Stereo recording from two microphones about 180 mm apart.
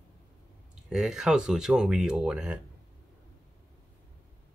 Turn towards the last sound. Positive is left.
turn(degrees=-5)  # may be behind; listen again after turning